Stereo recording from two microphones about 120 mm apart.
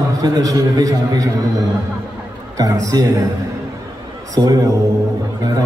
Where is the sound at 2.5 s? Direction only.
30° right (ahead or behind).